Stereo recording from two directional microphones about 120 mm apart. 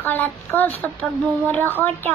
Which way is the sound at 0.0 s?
15° left (ahead or behind).